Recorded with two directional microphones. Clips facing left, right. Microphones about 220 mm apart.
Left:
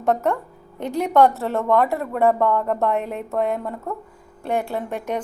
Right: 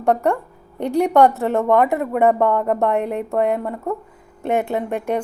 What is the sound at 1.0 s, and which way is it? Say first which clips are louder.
Speech: right 1 dB; 15° right (ahead or behind).